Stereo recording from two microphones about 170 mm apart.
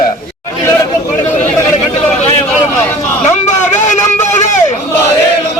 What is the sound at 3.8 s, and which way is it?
Vehicle, 45° left (ahead or behind).